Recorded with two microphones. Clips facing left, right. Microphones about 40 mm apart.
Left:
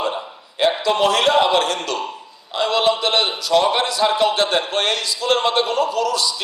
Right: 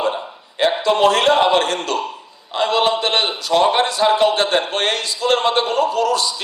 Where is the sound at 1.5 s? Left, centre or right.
Right.